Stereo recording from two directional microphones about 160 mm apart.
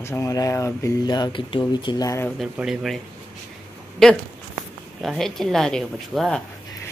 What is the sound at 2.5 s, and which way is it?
Speech, 5° right (ahead or behind).